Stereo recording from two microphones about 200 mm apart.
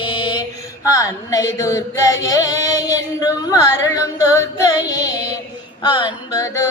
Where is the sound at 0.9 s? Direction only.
15° left (ahead or behind).